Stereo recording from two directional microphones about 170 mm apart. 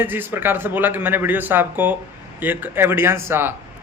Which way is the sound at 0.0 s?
10° right (ahead or behind).